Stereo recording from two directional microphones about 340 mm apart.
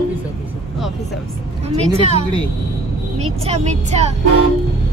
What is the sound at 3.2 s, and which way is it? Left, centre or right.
Speech, centre.